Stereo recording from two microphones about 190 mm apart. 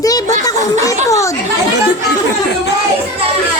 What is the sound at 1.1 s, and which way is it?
Chatter, 15° left (ahead or behind).